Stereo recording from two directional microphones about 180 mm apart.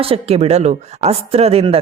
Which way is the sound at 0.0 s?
35° right (ahead or behind).